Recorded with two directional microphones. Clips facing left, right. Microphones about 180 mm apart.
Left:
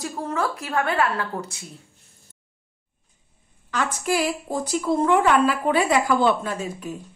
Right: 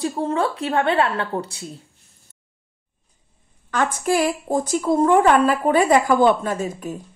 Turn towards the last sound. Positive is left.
turn(degrees=-45)  # may be behind; listen again after turning